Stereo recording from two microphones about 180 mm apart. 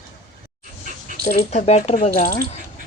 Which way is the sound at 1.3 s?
40° left (ahead or behind).